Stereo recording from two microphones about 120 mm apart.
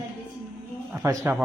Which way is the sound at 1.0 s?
20° right (ahead or behind).